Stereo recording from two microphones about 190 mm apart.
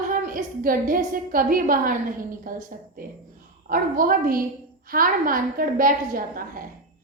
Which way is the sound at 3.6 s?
50° right (ahead or behind).